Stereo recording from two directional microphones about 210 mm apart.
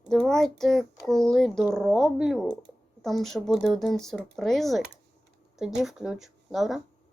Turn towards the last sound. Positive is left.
turn(degrees=0)  # may be behind; listen again after turning